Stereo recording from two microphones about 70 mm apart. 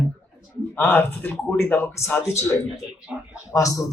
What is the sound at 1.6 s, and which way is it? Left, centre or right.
A man's voice, left.